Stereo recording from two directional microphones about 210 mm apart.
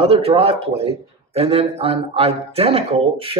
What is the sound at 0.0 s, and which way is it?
Speech, 25° right (ahead or behind).